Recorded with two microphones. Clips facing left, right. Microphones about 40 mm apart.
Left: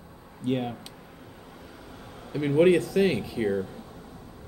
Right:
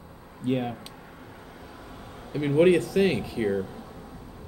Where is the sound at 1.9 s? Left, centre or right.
Centre.